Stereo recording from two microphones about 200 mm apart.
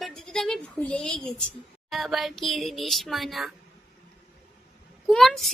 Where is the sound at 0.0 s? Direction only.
Centre (ahead or behind).